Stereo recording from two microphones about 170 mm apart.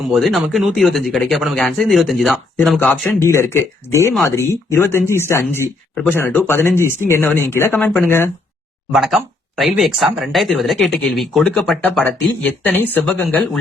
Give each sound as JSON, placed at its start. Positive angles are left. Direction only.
{"t": 0.0, "sound": "speech", "side_deg": 0}
{"t": 8.9, "sound": "speech", "side_deg": 0}